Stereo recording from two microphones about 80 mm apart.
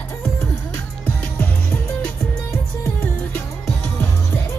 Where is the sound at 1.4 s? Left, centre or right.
Left.